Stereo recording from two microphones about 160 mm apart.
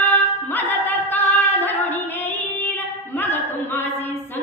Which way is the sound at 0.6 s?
10° left (ahead or behind).